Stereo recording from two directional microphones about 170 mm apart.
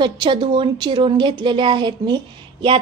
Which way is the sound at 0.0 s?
25° right (ahead or behind).